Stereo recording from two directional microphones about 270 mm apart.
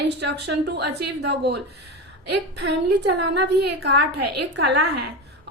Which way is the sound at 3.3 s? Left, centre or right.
Right.